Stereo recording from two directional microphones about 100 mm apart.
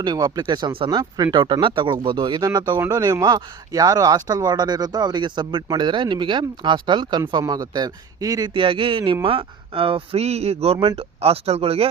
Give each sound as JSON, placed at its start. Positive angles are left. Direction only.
{"t": 0.0, "sound": "speech", "side_deg": -40}
{"t": 0.4, "sound": "speech", "side_deg": -50}
{"t": 0.9, "sound": "speech", "side_deg": -45}
{"t": 2.4, "sound": "speech", "side_deg": -40}
{"t": 7.4, "sound": "speech", "side_deg": -40}
{"t": 8.5, "sound": "speech", "side_deg": -60}